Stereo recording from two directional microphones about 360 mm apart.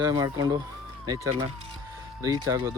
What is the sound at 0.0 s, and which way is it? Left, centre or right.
Speech, centre.